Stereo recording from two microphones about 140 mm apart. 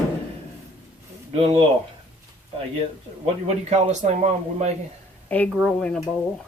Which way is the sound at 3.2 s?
50° right (ahead or behind).